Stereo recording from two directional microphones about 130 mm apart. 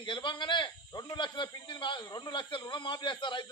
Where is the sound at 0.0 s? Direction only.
40° left (ahead or behind).